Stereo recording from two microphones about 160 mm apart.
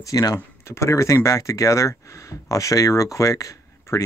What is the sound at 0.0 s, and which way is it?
Speech, 20° left (ahead or behind).